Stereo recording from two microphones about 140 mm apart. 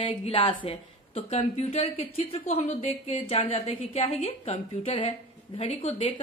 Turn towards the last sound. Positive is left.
turn(degrees=50)  # may be behind; listen again after turning